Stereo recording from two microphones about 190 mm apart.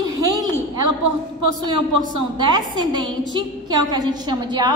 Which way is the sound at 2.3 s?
25° right (ahead or behind).